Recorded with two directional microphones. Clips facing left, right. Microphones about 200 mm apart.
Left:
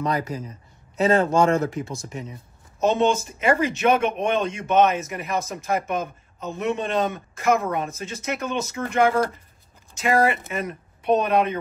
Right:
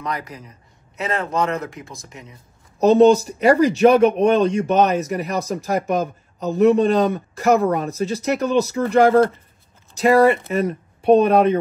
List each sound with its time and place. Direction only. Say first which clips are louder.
0.0 s speech: left 4 dB; 30° left (ahead or behind)
2.8 s speech: right 8 dB; 35° right (ahead or behind)